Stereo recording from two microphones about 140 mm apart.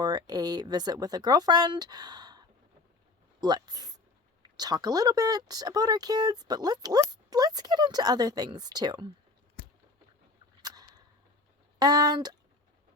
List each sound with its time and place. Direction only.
0.0 s speech: 30° right (ahead or behind)
3.4 s speech: 30° right (ahead or behind)
11.8 s speech: 30° right (ahead or behind)